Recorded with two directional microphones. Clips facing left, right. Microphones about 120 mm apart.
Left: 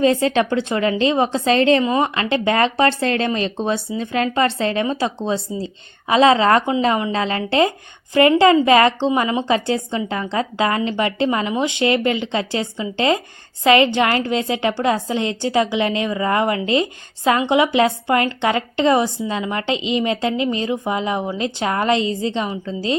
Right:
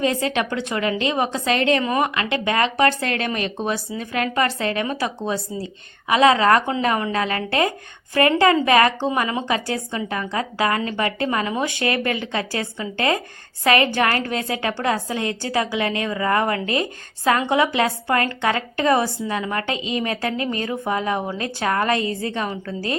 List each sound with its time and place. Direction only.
0.0 s speech: 30° left (ahead or behind)